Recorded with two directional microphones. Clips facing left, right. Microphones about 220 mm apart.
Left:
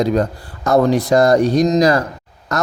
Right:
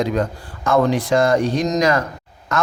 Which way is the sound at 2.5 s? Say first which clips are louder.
Left 1 dB; 40° left (ahead or behind).